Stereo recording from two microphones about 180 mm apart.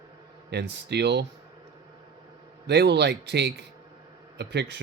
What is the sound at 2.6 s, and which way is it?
Speech, 65° right (ahead or behind).